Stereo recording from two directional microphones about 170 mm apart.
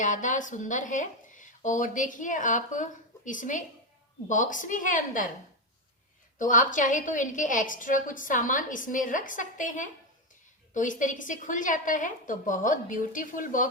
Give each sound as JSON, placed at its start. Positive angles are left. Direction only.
{"t": 0.0, "sound": "speech", "side_deg": 50}
{"t": 6.4, "sound": "speech", "side_deg": 50}